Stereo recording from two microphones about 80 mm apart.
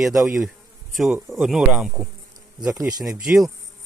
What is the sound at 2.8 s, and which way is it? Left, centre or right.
Speech, right.